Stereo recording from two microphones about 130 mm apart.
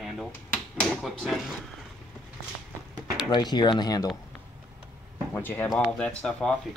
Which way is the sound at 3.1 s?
30° left (ahead or behind).